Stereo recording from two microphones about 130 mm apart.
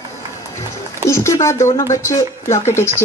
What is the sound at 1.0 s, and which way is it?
Speech, 25° left (ahead or behind).